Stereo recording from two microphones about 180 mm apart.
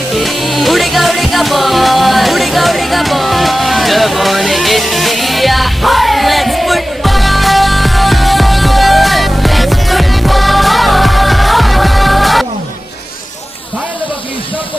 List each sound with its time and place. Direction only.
0.1 s music: centre (ahead or behind)